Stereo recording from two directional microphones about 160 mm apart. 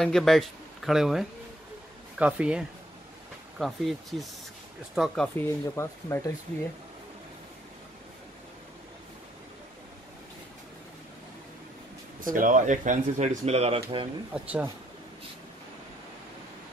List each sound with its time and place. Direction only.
0.0 s speech: centre (ahead or behind)
5.4 s speech: 20° left (ahead or behind)
12.3 s speech: 55° right (ahead or behind); by 14.0 s 35° right (ahead or behind)
14.3 s speech: 10° right (ahead or behind)